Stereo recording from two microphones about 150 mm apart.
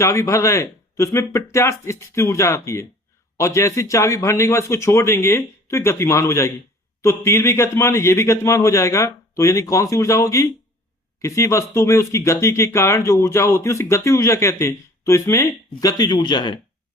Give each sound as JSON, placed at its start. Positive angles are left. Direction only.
{"t": 0.0, "sound": "a man's voice", "side_deg": 20}